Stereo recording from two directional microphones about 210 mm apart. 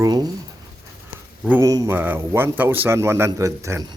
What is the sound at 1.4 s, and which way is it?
Speech, 10° right (ahead or behind).